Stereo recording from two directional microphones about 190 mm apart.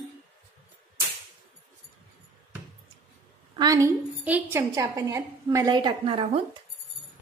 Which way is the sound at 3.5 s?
20° right (ahead or behind).